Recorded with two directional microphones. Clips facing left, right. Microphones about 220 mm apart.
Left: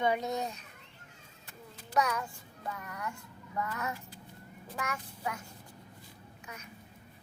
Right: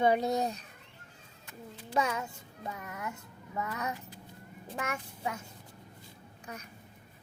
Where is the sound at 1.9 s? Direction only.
25° right (ahead or behind).